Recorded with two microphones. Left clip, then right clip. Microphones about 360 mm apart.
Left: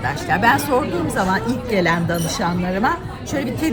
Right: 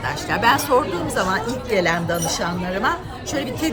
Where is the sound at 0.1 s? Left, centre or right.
Centre.